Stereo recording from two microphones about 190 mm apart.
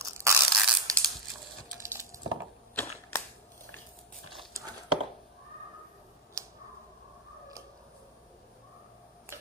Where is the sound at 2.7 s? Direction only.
10° left (ahead or behind).